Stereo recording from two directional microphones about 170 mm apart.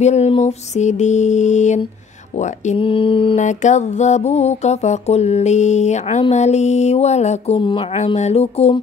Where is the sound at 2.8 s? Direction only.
30° left (ahead or behind).